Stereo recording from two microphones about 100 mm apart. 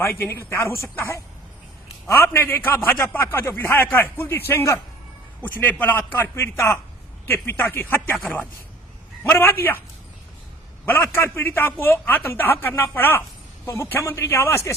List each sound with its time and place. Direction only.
0.0 s a man's voice: 25° left (ahead or behind)
10.8 s a man's voice: 20° left (ahead or behind)